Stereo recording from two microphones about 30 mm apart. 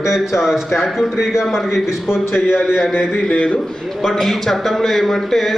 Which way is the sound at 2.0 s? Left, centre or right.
Right.